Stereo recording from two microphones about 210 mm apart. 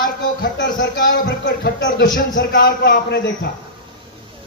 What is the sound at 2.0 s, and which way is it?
Speech, 40° left (ahead or behind).